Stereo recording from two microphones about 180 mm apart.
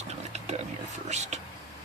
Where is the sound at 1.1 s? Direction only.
40° right (ahead or behind).